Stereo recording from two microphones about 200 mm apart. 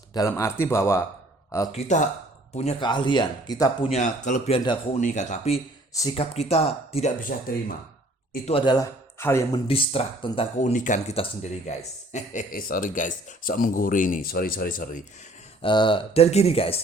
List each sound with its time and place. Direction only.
0.1 s speech: 15° left (ahead or behind)
1.7 s speech: 35° left (ahead or behind); by 3.9 s 20° left (ahead or behind)
3.9 s speech: 35° left (ahead or behind)
4.9 s speech: 35° left (ahead or behind)
5.9 s speech: 15° left (ahead or behind)
6.1 s speech: 30° left (ahead or behind)
7.3 s speech: 45° left (ahead or behind)
8.4 s speech: 25° left (ahead or behind)
9.6 s speech: 30° left (ahead or behind); by 15.0 s 45° left (ahead or behind)
15.6 s speech: 25° left (ahead or behind)